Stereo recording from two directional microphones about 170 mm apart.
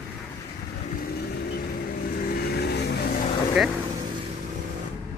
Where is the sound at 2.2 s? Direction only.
70° left (ahead or behind).